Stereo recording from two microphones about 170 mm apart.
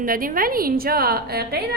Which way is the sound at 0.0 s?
55° right (ahead or behind).